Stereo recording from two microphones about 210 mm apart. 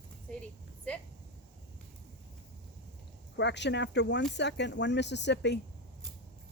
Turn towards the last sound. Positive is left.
turn(degrees=55)  # may be behind; listen again after turning